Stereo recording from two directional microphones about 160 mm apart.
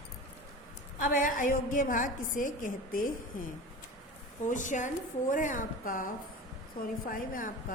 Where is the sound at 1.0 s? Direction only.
60° left (ahead or behind).